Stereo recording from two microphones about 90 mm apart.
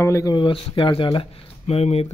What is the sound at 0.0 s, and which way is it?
Speech, 35° left (ahead or behind).